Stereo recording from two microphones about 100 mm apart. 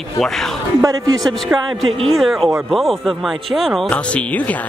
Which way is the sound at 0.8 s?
40° right (ahead or behind).